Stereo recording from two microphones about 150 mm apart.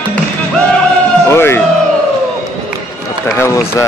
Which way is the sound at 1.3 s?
15° left (ahead or behind).